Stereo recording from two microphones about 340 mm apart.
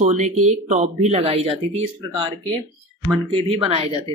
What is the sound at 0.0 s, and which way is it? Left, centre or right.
Speech, centre.